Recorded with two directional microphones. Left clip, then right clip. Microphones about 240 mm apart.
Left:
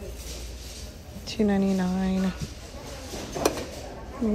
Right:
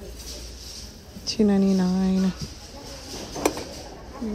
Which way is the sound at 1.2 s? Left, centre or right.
Centre.